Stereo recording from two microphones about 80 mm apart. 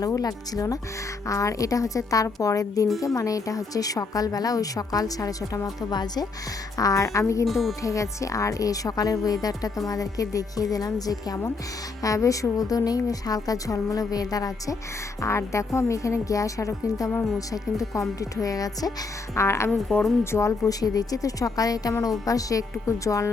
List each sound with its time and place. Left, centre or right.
0.0 s a woman's voice: left
6.7 s a woman's voice: left
7.4 s speech: centre
7.8 s a woman's voice: left
15.2 s a woman's voice: left
19.4 s speech: left
19.9 s speech: centre
20.3 s a woman's voice: left